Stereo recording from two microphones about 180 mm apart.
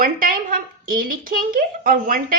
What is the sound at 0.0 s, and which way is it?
A woman's voice, 50° right (ahead or behind).